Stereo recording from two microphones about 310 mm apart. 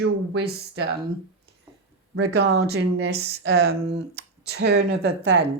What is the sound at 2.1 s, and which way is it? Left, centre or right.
Speech, right.